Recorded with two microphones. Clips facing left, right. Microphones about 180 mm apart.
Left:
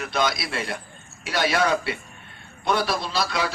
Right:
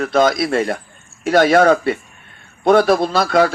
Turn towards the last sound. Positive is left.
turn(degrees=-50)  # may be behind; listen again after turning